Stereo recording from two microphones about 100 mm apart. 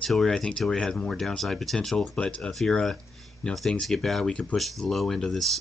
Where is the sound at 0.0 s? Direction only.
5° left (ahead or behind).